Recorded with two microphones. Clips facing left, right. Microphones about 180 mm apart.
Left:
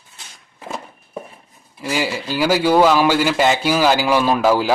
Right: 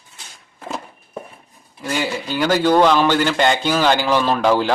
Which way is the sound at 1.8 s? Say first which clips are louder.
Left 1 dB; 5° left (ahead or behind).